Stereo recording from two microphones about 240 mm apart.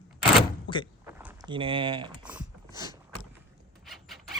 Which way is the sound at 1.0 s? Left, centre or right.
Centre.